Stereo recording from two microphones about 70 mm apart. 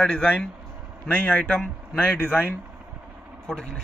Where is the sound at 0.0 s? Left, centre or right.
Centre.